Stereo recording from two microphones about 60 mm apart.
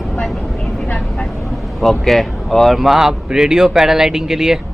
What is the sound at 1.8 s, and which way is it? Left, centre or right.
Speech, centre.